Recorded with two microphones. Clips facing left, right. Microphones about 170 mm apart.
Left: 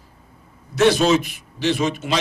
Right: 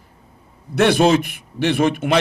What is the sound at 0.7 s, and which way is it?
Speech, 55° right (ahead or behind).